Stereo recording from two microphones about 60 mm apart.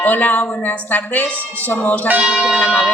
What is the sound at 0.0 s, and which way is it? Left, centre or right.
A man's voice, left.